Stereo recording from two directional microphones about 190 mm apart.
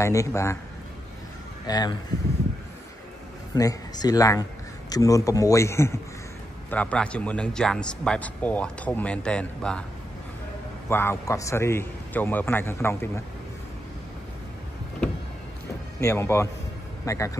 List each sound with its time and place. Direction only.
0.0 s speech: 15° left (ahead or behind)
1.7 s speech: 20° left (ahead or behind)
3.5 s a man's voice: 20° left (ahead or behind)
10.9 s speech: 10° left (ahead or behind)
16.0 s speech: 15° left (ahead or behind)